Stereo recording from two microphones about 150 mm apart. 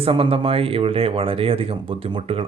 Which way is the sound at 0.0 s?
40° right (ahead or behind).